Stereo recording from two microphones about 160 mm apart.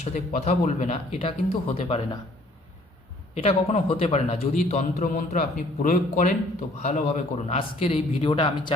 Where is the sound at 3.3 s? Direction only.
40° left (ahead or behind).